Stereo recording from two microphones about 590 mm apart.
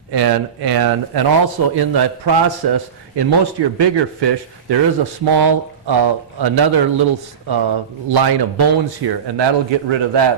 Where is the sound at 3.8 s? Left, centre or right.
Right.